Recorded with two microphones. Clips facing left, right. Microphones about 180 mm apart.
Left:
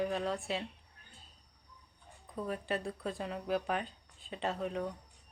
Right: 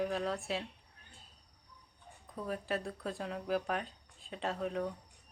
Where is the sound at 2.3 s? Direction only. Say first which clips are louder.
Left 1 dB; centre (ahead or behind).